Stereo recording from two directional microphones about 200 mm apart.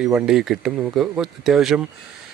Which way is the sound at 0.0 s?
5° right (ahead or behind).